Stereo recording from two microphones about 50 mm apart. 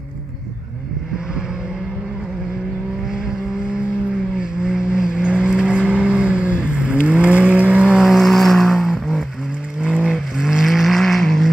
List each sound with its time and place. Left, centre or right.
4.4 s vehicle: centre
8.0 s vehicle: centre